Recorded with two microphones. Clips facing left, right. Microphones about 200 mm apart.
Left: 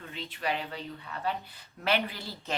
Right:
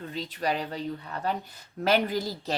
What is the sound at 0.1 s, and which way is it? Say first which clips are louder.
A woman's voice: right 3 dB; 40° right (ahead or behind).